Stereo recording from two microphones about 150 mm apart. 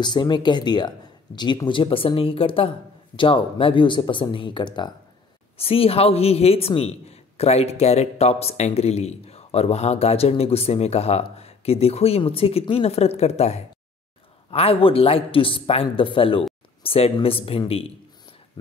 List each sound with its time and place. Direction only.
0.0 s speech: 30° left (ahead or behind)